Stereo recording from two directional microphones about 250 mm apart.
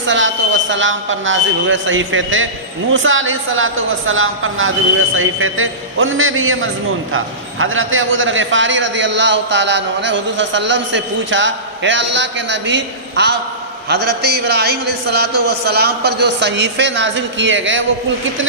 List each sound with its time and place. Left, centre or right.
0.1 s a man's voice: right